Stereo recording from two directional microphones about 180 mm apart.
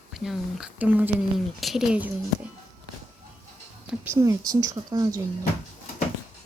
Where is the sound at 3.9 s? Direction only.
15° right (ahead or behind).